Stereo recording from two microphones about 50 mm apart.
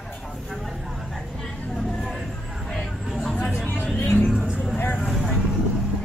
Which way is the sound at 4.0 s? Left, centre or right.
Left.